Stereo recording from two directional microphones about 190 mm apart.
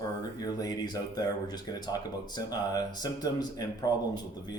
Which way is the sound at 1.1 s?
20° left (ahead or behind).